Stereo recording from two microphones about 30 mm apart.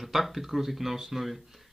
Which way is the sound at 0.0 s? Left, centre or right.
Centre.